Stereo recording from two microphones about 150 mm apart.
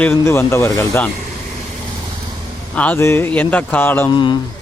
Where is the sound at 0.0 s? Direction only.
15° left (ahead or behind).